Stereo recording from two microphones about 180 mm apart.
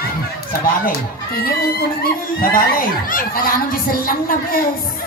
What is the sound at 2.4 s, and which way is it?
A woman's voice, 50° left (ahead or behind).